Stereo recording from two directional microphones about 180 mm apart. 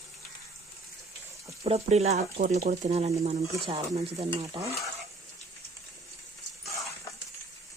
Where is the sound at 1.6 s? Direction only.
35° right (ahead or behind).